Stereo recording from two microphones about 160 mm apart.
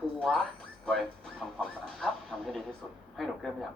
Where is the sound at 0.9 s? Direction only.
Centre (ahead or behind).